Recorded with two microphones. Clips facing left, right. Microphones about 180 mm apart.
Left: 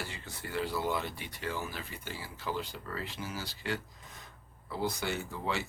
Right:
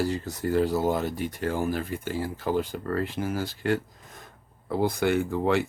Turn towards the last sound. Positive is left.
turn(degrees=-55)  # may be behind; listen again after turning